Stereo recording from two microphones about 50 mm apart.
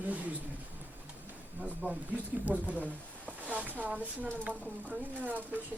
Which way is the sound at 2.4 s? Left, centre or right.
Right.